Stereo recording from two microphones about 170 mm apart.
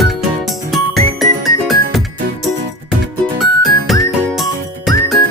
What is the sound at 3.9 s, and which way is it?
Music, centre (ahead or behind).